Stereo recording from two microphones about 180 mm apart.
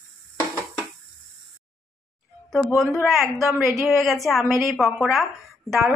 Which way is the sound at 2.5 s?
Centre (ahead or behind).